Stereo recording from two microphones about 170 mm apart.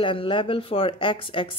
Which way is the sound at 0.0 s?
30° left (ahead or behind).